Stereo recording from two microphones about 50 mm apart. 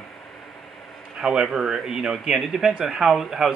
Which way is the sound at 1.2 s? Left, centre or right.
Centre.